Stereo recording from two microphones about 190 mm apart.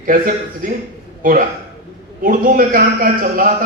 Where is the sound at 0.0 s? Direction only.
45° right (ahead or behind).